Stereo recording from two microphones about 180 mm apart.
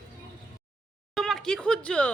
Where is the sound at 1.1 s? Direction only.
Centre (ahead or behind).